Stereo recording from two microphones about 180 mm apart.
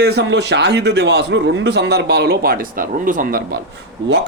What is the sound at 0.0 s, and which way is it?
Speech, 65° right (ahead or behind).